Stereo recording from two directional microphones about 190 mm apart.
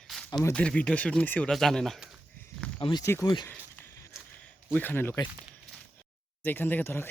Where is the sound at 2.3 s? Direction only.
10° left (ahead or behind).